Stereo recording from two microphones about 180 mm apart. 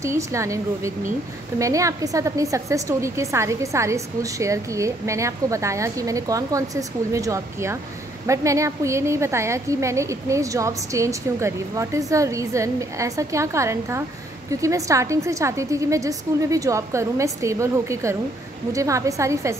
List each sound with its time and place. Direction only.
0.0 s a woman's voice: 15° right (ahead or behind)